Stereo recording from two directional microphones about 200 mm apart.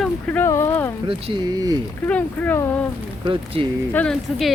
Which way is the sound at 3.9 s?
5° left (ahead or behind).